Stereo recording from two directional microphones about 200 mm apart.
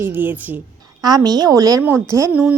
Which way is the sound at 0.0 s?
10° right (ahead or behind).